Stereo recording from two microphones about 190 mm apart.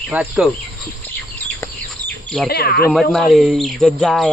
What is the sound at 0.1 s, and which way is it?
Speech, 5° right (ahead or behind).